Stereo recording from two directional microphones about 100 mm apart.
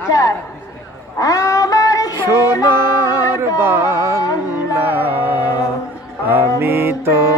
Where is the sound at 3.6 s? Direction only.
25° right (ahead or behind).